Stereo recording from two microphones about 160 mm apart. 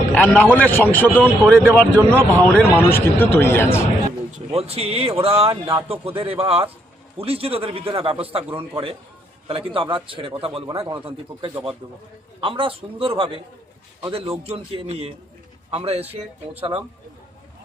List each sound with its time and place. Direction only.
0.1 s a man's voice: 5° left (ahead or behind)
4.3 s speech: 45° right (ahead or behind)
5.5 s speech: 20° right (ahead or behind)
5.9 s speech: 35° right (ahead or behind)